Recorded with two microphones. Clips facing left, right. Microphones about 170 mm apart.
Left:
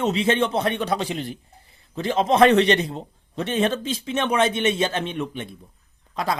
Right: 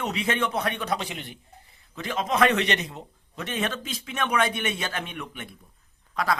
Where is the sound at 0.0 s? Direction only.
25° left (ahead or behind).